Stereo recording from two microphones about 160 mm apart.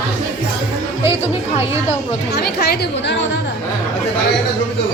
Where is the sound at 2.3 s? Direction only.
90° left.